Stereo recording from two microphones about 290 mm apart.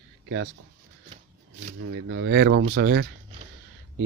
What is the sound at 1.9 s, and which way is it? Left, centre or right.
Speech, right.